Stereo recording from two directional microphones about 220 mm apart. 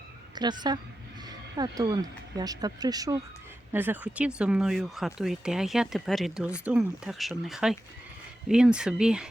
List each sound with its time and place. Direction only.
0.3 s speech: 20° right (ahead or behind); by 9.2 s 5° right (ahead or behind)